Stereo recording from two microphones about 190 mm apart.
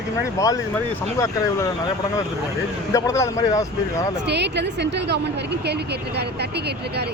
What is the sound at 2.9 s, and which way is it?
Speech, 15° left (ahead or behind).